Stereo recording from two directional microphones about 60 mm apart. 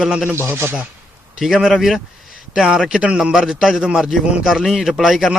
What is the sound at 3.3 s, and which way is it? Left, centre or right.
Speech, centre.